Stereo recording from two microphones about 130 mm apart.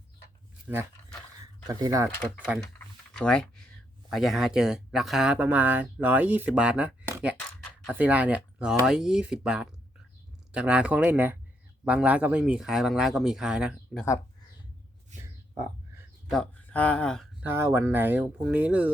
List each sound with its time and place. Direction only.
1.6 s speech: 25° right (ahead or behind)
2.2 s speech: 10° left (ahead or behind)
2.7 s typing: 5° left (ahead or behind)
4.1 s speech: centre (ahead or behind)
7.1 s beatboxing: 10° right (ahead or behind)
7.9 s speech: 10° right (ahead or behind)
15.1 s a sound: 65° right (ahead or behind)
16.3 s speech: 10° left (ahead or behind)
17.4 s speech: 20° right (ahead or behind)